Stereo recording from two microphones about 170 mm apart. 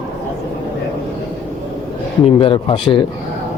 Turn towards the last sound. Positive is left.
turn(degrees=30)  # may be behind; listen again after turning